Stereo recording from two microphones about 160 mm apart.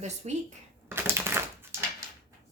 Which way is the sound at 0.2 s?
40° right (ahead or behind).